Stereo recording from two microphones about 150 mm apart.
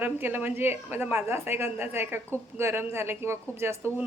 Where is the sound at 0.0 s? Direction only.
15° right (ahead or behind).